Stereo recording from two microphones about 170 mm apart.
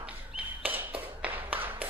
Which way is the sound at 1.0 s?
10° right (ahead or behind).